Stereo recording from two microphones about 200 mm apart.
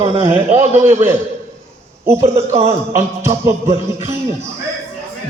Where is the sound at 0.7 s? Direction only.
35° right (ahead or behind).